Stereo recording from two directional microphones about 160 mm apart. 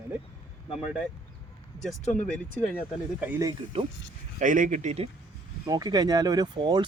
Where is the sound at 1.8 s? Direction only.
50° left (ahead or behind).